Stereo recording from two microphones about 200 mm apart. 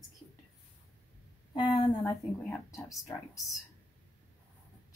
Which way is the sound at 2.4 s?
10° left (ahead or behind).